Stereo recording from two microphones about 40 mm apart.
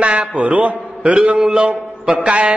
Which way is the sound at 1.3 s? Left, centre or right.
Right.